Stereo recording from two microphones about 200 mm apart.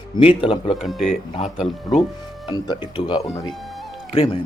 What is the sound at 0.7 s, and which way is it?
Speech, centre (ahead or behind).